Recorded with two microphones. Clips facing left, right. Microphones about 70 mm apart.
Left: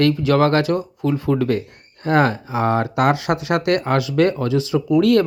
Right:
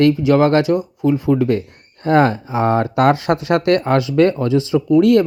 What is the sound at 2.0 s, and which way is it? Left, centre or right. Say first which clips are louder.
Speech: right 3 dB; right.